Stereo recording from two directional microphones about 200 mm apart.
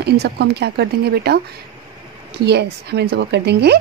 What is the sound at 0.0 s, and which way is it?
A woman's voice, 55° right (ahead or behind).